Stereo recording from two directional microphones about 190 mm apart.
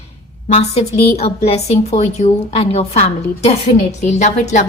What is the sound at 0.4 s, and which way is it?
Speech, 35° left (ahead or behind).